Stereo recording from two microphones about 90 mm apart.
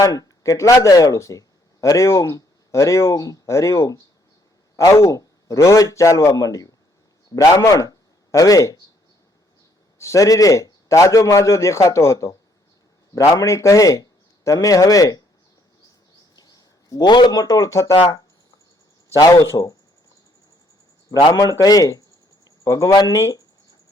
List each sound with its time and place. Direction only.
0.0 s a man's voice: 40° left (ahead or behind)
10.0 s a man's voice: 35° left (ahead or behind)
16.3 s speech: 45° left (ahead or behind)
19.1 s a man's voice: 40° left (ahead or behind)
21.6 s speech: 40° left (ahead or behind)
23.1 s a man's voice: 35° left (ahead or behind)